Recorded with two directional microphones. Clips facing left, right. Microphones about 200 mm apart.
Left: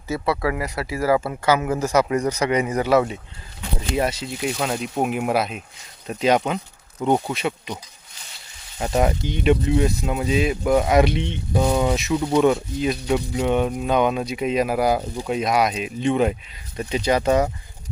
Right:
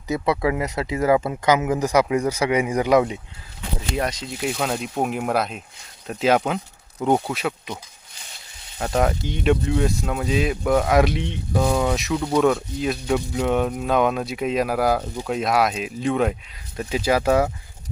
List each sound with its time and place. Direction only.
0.1 s speech: 20° right (ahead or behind)
3.8 s speech: 5° left (ahead or behind)
8.8 s speech: 5° left (ahead or behind)